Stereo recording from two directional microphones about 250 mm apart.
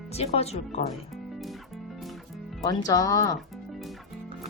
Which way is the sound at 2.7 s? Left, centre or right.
Centre.